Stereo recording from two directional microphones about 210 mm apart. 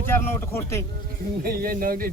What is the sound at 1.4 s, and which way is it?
Speech, 45° right (ahead or behind).